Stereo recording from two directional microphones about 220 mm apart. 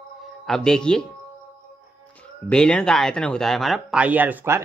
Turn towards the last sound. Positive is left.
turn(degrees=-10)  # may be behind; listen again after turning